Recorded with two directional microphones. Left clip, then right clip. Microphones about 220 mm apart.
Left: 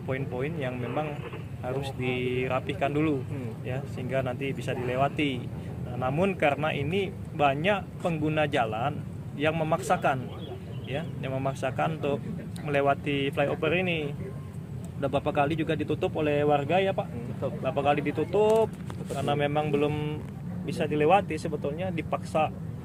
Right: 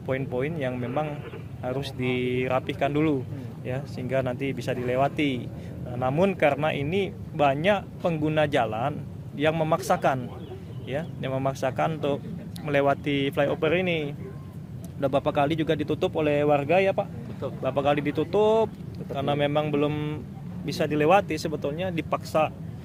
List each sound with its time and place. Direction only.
0.1 s a man's voice: 45° right (ahead or behind)